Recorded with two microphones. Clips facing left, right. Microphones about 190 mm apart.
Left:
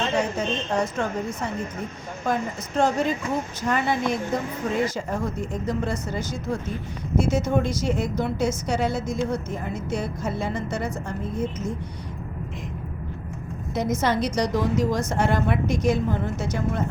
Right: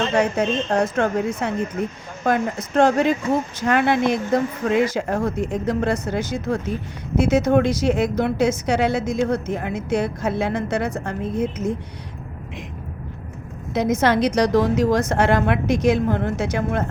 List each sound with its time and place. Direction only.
0.1 s a woman's voice: 65° right (ahead or behind)
13.7 s a woman's voice: 85° right